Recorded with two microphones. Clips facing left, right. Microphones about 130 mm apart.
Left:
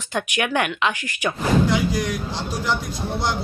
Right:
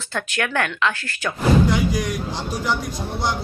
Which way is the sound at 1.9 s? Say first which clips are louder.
Even; centre (ahead or behind).